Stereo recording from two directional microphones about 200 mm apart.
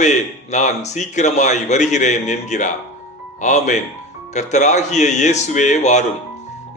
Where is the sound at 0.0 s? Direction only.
35° left (ahead or behind).